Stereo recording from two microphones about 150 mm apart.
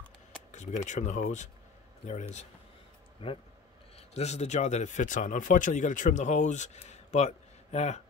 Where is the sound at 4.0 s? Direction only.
45° left (ahead or behind).